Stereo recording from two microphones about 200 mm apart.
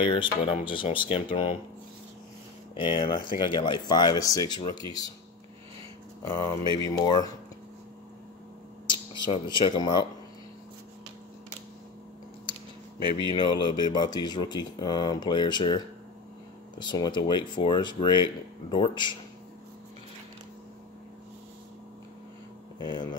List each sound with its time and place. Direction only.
0.0 s speech: 25° left (ahead or behind)
2.7 s speech: 25° left (ahead or behind)
6.2 s speech: 20° left (ahead or behind)
8.8 s speech: 20° left (ahead or behind)
13.3 s speech: 25° left (ahead or behind)
22.8 s speech: 25° left (ahead or behind)